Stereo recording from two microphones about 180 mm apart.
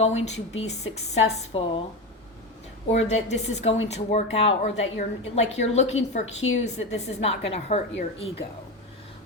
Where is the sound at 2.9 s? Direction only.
40° left (ahead or behind).